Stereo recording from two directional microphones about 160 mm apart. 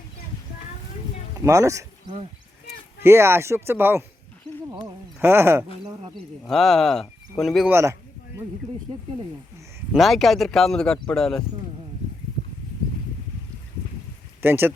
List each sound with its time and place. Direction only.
1.5 s speech: 20° right (ahead or behind)
5.2 s speech: 15° right (ahead or behind)
6.5 s speech: centre (ahead or behind)
7.7 s speech: 15° right (ahead or behind)
9.9 s speech: centre (ahead or behind)
14.4 s speech: 15° right (ahead or behind)